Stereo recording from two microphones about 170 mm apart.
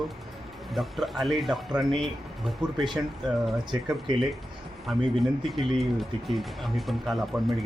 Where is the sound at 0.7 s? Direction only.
Centre (ahead or behind).